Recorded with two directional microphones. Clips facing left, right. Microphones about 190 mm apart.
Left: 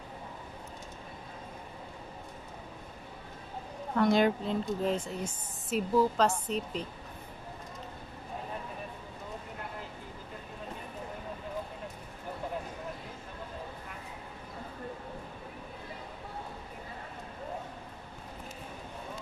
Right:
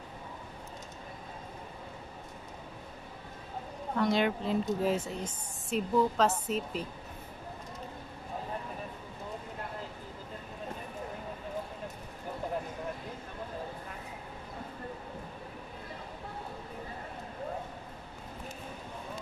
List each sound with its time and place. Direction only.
4.0 s a woman's voice: 50° left (ahead or behind)
4.5 s a woman's voice: 5° right (ahead or behind)